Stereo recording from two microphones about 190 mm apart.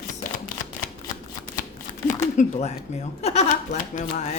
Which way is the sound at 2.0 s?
40° left (ahead or behind).